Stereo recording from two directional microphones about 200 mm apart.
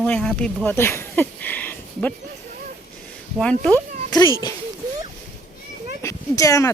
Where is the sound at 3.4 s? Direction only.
5° left (ahead or behind).